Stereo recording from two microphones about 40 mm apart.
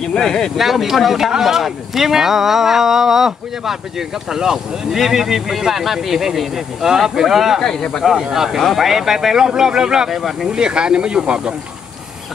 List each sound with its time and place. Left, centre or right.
0.0 s speech: centre
0.6 s speech: centre
7.6 s speech: centre
8.0 s speech: centre
10.5 s speech: right